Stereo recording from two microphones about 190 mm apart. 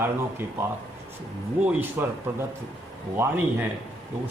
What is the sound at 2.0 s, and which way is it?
Speech, 10° right (ahead or behind).